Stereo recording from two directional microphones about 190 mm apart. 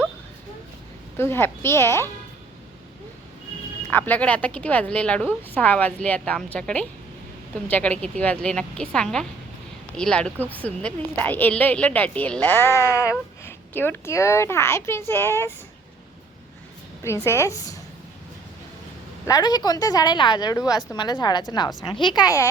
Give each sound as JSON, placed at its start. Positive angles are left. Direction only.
{"t": 1.1, "sound": "a woman's voice", "side_deg": 10}
{"t": 3.9, "sound": "a woman's voice", "side_deg": 10}
{"t": 17.0, "sound": "a woman's voice", "side_deg": 15}
{"t": 19.2, "sound": "a woman's voice", "side_deg": 20}